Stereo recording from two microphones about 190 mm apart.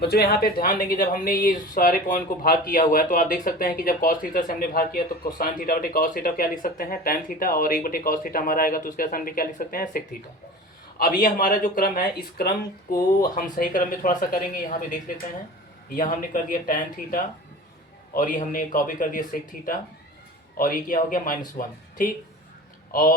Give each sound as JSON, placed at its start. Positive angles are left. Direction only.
{"t": 0.0, "sound": "speech", "side_deg": 55}
{"t": 22.9, "sound": "speech", "side_deg": 45}